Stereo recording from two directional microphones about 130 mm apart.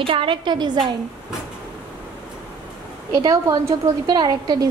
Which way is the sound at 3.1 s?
25° right (ahead or behind).